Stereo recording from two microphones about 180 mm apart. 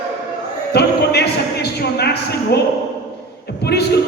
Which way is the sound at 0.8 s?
65° left (ahead or behind).